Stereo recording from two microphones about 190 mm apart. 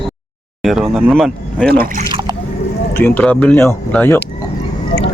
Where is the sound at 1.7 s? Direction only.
50° right (ahead or behind).